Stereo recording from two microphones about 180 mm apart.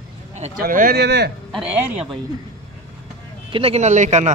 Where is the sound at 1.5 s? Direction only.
5° right (ahead or behind).